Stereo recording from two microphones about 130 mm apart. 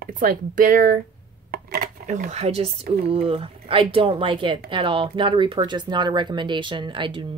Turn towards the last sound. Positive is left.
turn(degrees=-40)  # may be behind; listen again after turning